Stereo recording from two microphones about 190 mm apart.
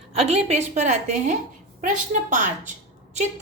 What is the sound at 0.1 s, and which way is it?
A woman's voice, 30° right (ahead or behind).